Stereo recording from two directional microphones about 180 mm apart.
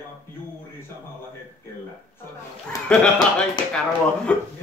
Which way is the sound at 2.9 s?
5° left (ahead or behind).